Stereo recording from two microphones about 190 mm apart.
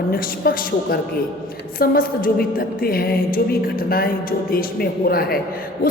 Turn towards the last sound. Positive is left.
turn(degrees=50)  # may be behind; listen again after turning